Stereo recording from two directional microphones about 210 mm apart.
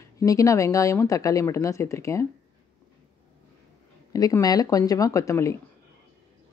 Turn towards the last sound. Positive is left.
turn(degrees=15)  # may be behind; listen again after turning